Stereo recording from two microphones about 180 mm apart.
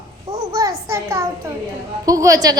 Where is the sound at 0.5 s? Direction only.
20° right (ahead or behind).